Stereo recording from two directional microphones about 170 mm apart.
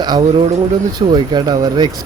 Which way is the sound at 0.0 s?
25° right (ahead or behind).